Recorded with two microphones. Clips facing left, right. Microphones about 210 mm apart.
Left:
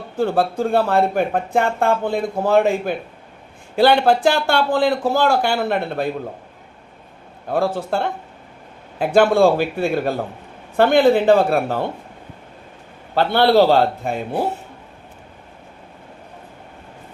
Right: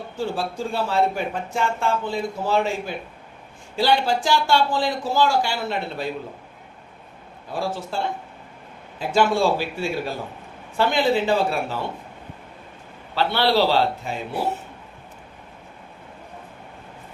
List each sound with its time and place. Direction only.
0.2 s speech: 60° left (ahead or behind)
7.4 s speech: 60° left (ahead or behind)
13.1 s a man's voice: 55° left (ahead or behind)